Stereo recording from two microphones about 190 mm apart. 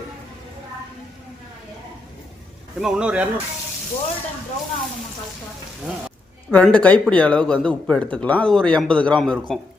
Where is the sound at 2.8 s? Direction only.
5° right (ahead or behind).